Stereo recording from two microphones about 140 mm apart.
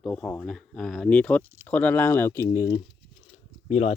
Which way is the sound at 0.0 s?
5° left (ahead or behind).